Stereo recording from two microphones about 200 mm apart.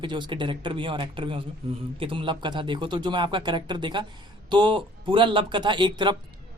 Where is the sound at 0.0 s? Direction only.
25° right (ahead or behind).